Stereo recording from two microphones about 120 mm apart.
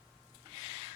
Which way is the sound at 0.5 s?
50° right (ahead or behind).